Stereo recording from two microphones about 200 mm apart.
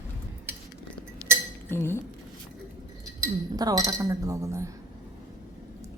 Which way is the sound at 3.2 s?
20° right (ahead or behind).